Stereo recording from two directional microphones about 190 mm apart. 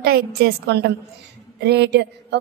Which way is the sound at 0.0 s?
55° right (ahead or behind).